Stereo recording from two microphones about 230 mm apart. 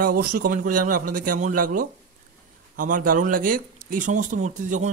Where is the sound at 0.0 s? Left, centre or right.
Right.